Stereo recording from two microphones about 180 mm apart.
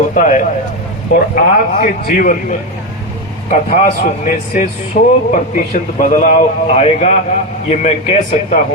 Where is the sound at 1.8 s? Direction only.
45° left (ahead or behind).